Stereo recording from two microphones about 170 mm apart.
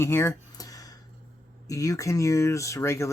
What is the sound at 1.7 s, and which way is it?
Speech, 20° left (ahead or behind).